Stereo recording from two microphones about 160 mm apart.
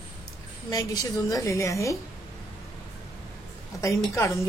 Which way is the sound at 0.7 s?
20° left (ahead or behind).